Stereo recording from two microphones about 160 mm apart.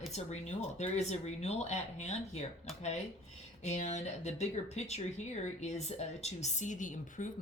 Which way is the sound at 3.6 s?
45° left (ahead or behind).